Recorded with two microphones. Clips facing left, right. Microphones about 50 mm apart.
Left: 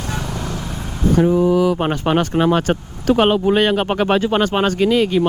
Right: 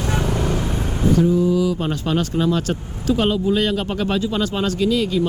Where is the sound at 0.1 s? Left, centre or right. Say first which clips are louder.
Right 5 dB; centre.